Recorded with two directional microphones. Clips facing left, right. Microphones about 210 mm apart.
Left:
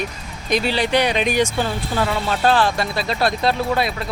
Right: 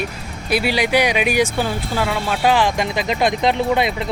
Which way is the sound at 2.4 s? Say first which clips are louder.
Right 1 dB; 15° right (ahead or behind).